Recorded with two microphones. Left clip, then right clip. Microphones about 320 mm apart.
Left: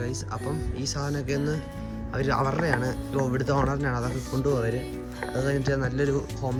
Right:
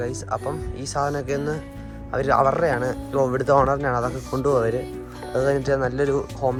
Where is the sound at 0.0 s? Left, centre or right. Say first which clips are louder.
Right 7 dB; centre.